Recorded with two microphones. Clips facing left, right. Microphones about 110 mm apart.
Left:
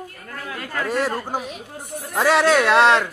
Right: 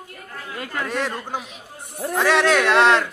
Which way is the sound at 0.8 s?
5° left (ahead or behind).